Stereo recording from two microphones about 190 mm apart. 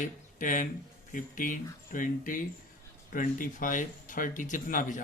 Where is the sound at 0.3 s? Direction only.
45° left (ahead or behind).